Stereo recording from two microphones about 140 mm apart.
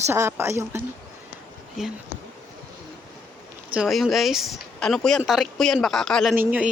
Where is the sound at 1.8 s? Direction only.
Centre (ahead or behind).